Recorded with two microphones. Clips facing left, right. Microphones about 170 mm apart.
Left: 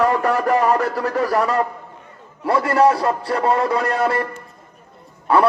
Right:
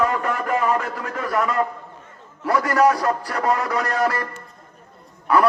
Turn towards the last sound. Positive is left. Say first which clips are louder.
# left 2 dB
turn(degrees=30)  # may be behind; listen again after turning